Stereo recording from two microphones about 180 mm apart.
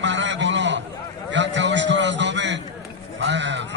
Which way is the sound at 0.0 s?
80° right.